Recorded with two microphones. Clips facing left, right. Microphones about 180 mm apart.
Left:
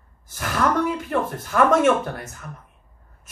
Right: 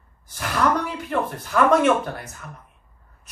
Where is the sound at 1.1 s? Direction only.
50° left (ahead or behind).